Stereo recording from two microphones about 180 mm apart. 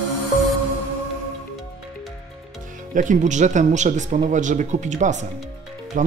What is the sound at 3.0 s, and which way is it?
Speech, 45° right (ahead or behind).